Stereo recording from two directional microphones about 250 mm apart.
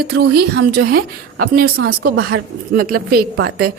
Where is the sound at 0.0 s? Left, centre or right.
Right.